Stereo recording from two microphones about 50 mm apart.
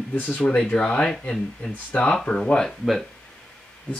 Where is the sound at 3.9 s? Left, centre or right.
Left.